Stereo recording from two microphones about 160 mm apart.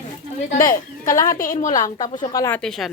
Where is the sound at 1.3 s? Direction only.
60° left (ahead or behind).